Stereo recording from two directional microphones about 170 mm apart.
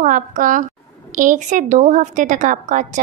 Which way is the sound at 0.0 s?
50° right (ahead or behind).